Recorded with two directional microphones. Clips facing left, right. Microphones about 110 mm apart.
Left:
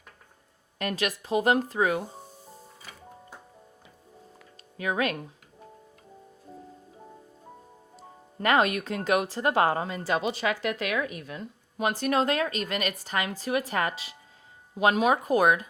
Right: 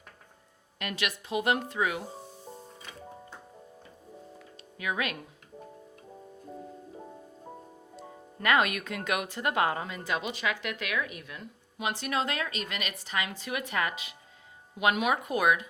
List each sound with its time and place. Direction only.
0.8 s speech: 40° left (ahead or behind)
4.8 s speech: 35° left (ahead or behind)
8.4 s speech: 30° left (ahead or behind)